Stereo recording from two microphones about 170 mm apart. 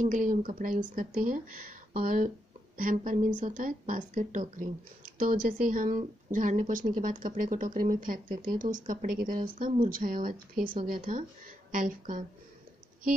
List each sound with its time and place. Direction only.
0.0 s speech: 50° right (ahead or behind)